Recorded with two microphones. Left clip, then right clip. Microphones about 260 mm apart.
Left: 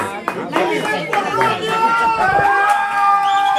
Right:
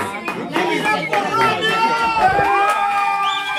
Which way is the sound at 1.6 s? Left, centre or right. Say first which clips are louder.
Even; centre.